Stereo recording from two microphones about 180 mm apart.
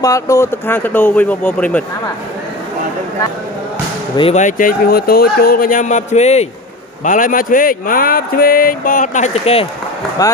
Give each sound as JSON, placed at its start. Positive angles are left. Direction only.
{"t": 0.0, "sound": "speech", "side_deg": 15}
{"t": 4.2, "sound": "speech", "side_deg": 40}